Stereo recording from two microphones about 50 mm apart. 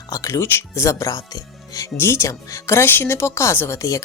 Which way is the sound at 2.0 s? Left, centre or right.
Left.